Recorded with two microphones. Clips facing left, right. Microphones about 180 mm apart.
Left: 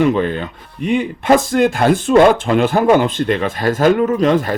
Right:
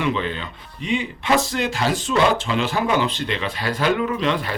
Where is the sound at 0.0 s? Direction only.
50° left (ahead or behind).